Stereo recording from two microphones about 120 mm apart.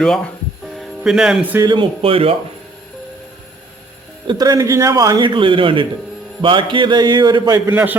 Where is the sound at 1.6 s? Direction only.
40° right (ahead or behind).